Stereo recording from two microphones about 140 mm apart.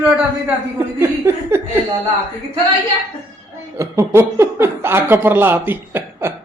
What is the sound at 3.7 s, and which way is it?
Speech, 20° right (ahead or behind).